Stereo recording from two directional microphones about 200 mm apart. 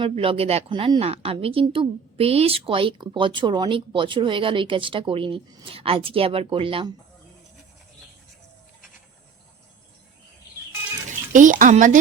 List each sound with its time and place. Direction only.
0.0 s speech: 25° right (ahead or behind)
11.3 s speech: 40° right (ahead or behind)